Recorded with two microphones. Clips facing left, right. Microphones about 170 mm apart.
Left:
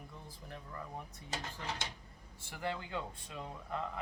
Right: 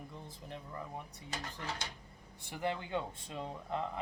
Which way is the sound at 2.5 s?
20° right (ahead or behind).